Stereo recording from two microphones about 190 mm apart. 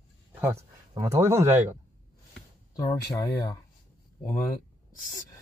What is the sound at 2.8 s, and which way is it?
Speech, 15° left (ahead or behind).